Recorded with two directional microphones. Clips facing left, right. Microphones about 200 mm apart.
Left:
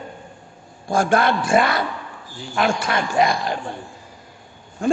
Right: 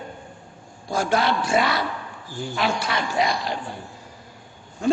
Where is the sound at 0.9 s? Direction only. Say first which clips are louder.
Left 4 dB; 50° left (ahead or behind).